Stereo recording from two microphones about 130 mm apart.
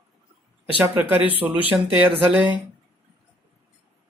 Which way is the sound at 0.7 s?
10° right (ahead or behind).